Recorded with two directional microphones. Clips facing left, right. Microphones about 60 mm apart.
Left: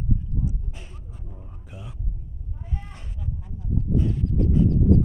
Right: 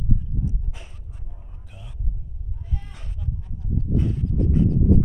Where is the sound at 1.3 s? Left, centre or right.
Centre.